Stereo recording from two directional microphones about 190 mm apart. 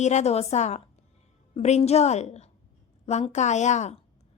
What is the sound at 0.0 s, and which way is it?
A woman's voice, 35° left (ahead or behind).